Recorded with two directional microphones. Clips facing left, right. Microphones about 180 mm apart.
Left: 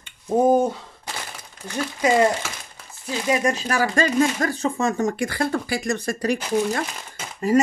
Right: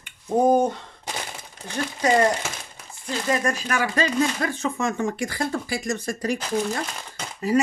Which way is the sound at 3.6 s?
35° left (ahead or behind).